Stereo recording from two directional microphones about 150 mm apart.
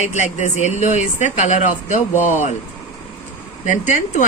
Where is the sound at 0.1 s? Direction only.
50° left (ahead or behind).